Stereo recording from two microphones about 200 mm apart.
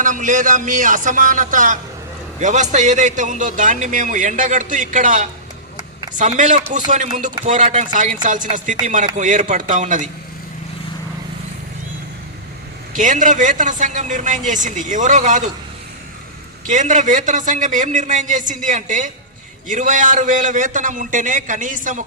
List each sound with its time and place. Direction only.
0.0 s a man's voice: 40° right (ahead or behind)
12.9 s a man's voice: 40° right (ahead or behind)
16.6 s a man's voice: 40° right (ahead or behind)